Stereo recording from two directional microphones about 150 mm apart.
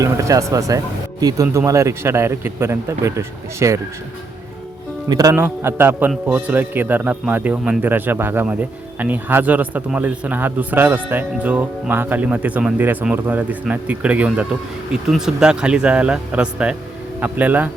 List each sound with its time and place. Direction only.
0.0 s speech: 20° right (ahead or behind)
5.0 s a man's voice: 25° right (ahead or behind)